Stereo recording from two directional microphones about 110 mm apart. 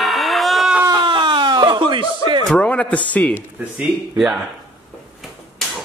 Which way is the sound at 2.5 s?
10° left (ahead or behind).